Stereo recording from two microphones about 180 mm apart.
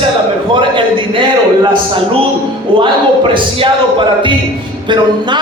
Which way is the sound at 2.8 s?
30° right (ahead or behind).